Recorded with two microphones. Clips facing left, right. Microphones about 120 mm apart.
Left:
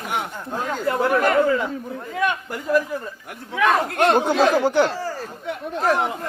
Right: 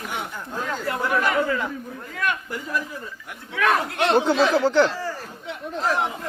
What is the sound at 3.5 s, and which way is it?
Speech, 15° left (ahead or behind).